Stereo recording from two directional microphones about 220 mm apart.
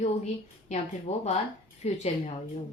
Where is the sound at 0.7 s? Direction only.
30° left (ahead or behind).